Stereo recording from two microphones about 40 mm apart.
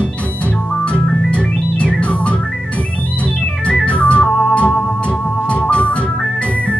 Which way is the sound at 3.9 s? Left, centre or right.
Left.